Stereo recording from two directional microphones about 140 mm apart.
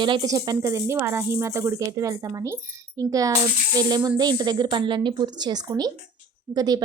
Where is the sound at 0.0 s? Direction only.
35° right (ahead or behind).